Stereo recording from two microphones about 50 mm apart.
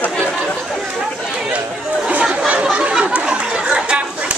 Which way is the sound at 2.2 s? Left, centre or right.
Right.